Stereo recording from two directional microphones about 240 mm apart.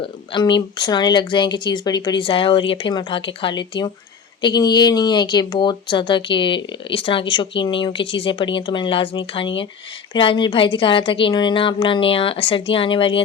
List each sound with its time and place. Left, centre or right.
0.0 s speech: centre